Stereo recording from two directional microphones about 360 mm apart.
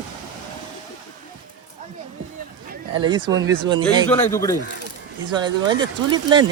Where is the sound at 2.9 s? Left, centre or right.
Centre.